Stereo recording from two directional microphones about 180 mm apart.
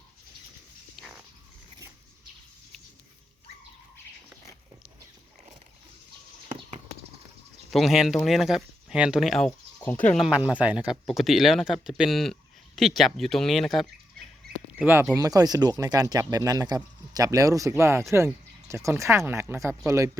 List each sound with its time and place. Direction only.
7.7 s speech: centre (ahead or behind)
14.8 s speech: 5° right (ahead or behind)